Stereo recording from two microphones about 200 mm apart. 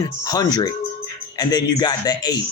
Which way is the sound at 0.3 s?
20° left (ahead or behind).